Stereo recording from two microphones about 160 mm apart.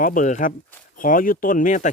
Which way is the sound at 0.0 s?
55° left (ahead or behind).